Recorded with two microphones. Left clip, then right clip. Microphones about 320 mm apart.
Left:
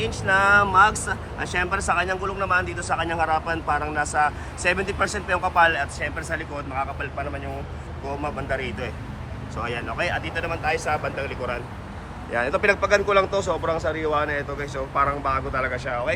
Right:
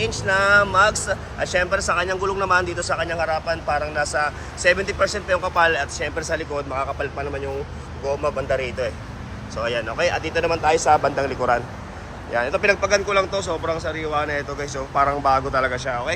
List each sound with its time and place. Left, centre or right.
0.0 s speech: centre
8.4 s speech: centre
12.3 s speech: centre